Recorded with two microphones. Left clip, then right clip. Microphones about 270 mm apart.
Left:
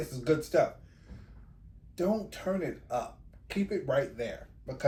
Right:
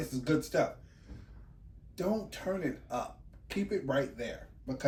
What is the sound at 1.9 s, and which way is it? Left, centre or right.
Speech, left.